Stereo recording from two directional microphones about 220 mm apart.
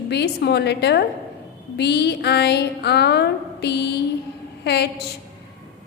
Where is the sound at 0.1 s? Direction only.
50° left (ahead or behind).